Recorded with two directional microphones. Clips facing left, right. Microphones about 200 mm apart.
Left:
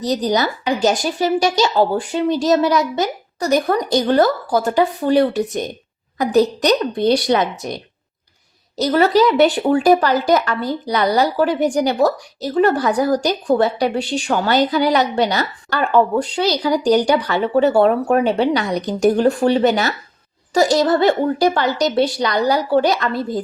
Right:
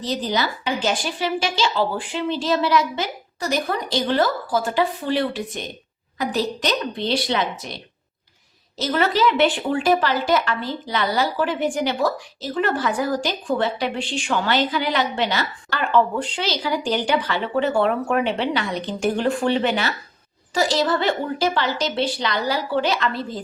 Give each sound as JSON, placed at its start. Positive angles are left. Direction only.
{"t": 0.1, "sound": "a woman's voice", "side_deg": 40}
{"t": 8.9, "sound": "speech", "side_deg": 40}